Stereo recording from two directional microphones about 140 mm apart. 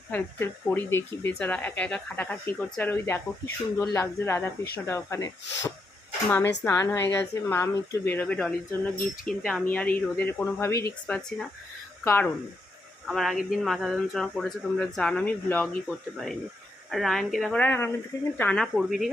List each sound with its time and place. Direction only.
0.1 s speech: 15° left (ahead or behind)
11.0 s speech: 5° left (ahead or behind)
13.1 s speech: centre (ahead or behind)
17.6 s speech: 15° left (ahead or behind)